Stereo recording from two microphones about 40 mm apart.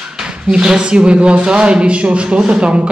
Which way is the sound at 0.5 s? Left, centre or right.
Centre.